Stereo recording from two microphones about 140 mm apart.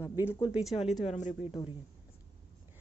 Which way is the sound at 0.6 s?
Centre (ahead or behind).